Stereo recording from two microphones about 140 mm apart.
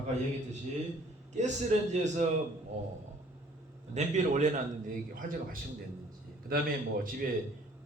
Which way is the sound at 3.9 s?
55° right (ahead or behind).